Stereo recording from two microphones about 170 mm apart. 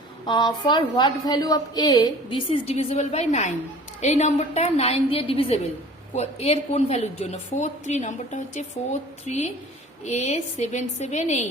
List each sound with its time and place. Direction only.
0.3 s a woman's voice: 25° left (ahead or behind); by 11.3 s 45° left (ahead or behind)